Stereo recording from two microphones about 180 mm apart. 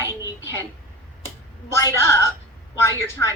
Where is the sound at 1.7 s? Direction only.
15° left (ahead or behind).